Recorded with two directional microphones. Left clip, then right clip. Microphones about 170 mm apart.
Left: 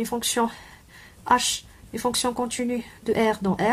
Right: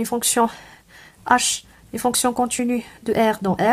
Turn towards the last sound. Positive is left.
turn(degrees=-40)  # may be behind; listen again after turning